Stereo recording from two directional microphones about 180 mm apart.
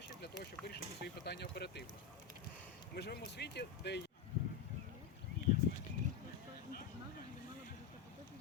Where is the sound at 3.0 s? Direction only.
65° left (ahead or behind).